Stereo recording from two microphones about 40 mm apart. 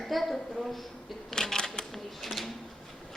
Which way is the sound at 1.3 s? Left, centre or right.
Centre.